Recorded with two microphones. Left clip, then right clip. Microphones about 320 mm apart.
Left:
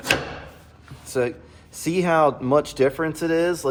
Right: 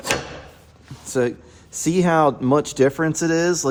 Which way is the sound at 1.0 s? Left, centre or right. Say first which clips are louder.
Right 2 dB; right.